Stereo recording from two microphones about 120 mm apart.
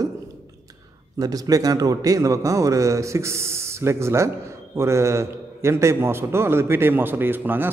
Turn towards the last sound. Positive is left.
turn(degrees=-15)  # may be behind; listen again after turning